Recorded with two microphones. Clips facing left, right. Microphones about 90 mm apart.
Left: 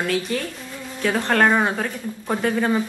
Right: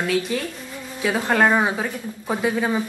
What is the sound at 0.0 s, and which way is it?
Speech, 5° right (ahead or behind).